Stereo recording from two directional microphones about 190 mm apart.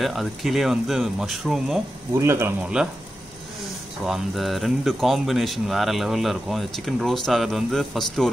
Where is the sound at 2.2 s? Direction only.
15° right (ahead or behind).